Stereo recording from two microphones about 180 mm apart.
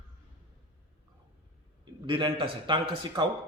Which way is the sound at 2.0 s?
25° right (ahead or behind).